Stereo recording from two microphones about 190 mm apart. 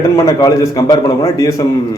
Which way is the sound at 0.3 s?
20° left (ahead or behind).